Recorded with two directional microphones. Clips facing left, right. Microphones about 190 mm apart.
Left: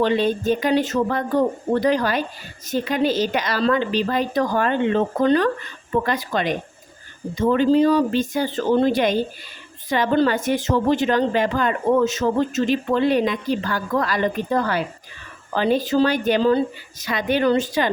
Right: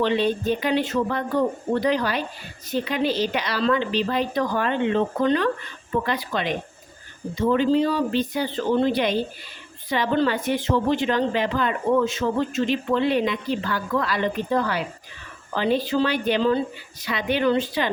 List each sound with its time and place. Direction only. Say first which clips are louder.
0.0 s speech: left 2 dB; 45° left (ahead or behind)